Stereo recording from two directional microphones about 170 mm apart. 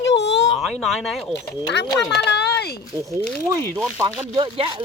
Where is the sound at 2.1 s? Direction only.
75° left (ahead or behind).